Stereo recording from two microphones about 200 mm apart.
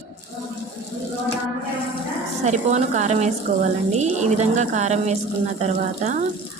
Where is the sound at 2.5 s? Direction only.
35° right (ahead or behind).